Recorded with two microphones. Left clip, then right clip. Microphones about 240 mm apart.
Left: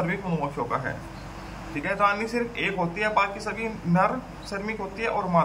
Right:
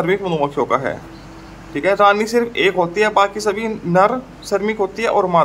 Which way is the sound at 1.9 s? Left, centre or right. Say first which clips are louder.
Right 11 dB; right.